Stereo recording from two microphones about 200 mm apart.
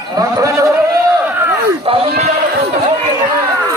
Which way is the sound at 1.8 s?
25° right (ahead or behind).